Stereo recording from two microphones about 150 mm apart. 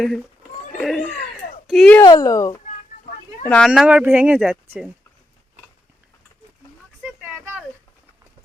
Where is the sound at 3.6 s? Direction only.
10° right (ahead or behind).